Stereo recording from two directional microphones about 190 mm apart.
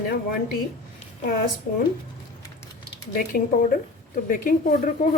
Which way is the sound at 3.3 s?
45° left (ahead or behind).